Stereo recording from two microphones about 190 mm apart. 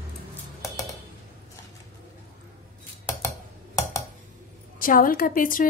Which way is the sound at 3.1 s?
10° left (ahead or behind).